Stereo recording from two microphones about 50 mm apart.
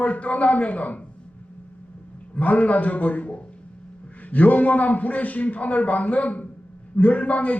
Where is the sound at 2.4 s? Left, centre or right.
Left.